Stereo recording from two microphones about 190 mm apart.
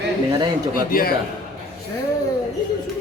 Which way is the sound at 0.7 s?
50° left (ahead or behind).